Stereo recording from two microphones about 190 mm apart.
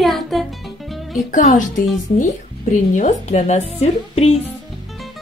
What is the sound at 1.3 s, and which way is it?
Speech, 40° left (ahead or behind).